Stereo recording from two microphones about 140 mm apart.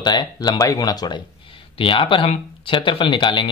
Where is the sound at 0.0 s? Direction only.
30° left (ahead or behind).